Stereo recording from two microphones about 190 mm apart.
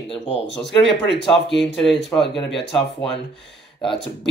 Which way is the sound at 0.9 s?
65° left (ahead or behind).